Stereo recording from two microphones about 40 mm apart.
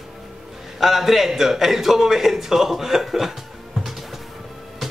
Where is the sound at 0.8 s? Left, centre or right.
Centre.